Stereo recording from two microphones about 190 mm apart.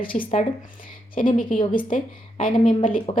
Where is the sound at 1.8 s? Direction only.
45° left (ahead or behind).